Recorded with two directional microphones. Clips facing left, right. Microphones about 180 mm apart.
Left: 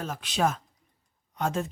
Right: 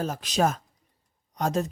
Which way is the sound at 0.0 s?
40° right (ahead or behind).